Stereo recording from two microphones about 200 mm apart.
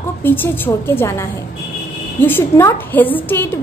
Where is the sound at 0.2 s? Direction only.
10° left (ahead or behind).